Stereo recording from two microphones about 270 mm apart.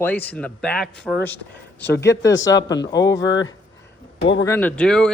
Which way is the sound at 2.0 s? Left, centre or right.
Centre.